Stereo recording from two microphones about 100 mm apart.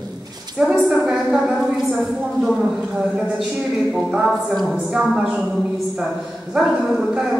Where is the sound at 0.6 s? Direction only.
10° right (ahead or behind).